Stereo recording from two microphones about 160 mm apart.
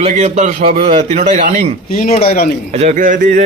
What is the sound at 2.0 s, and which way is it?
Speech, 45° left (ahead or behind).